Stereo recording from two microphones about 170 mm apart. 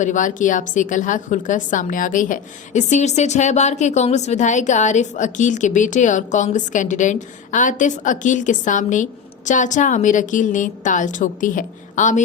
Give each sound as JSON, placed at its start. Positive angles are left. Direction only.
{"t": 0.0, "sound": "a woman's voice", "side_deg": 50}